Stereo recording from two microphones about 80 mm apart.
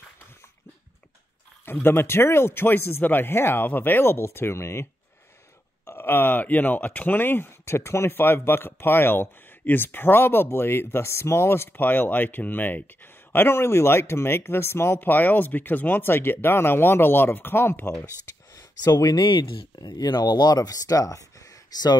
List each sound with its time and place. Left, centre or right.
1.7 s speech: left
5.9 s speech: left
18.5 s a sound: left
19.2 s speech: left